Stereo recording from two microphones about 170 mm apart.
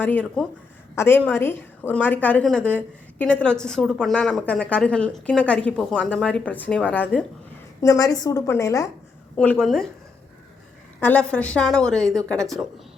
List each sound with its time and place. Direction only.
0.0 s a woman's voice: 10° left (ahead or behind)
7.8 s a woman's voice: 20° left (ahead or behind)
9.4 s a woman's voice: 5° left (ahead or behind)
11.0 s a woman's voice: 10° left (ahead or behind)